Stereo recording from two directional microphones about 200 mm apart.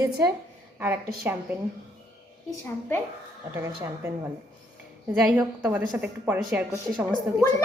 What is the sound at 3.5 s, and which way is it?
Speech, 10° right (ahead or behind).